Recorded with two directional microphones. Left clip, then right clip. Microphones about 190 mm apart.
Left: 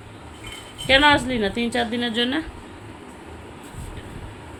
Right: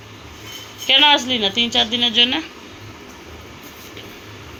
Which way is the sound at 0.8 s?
20° left (ahead or behind).